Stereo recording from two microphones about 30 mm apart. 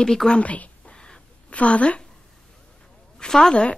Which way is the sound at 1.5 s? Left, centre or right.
Left.